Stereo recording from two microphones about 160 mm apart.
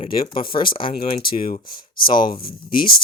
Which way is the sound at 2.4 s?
65° left (ahead or behind).